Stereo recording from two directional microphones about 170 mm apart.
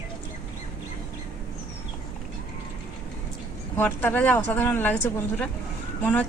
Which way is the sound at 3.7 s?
10° left (ahead or behind).